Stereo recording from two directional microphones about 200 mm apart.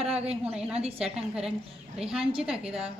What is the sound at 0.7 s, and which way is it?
Speech, 30° right (ahead or behind).